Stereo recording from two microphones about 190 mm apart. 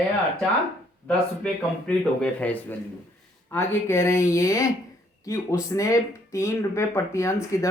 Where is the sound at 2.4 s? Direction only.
10° left (ahead or behind).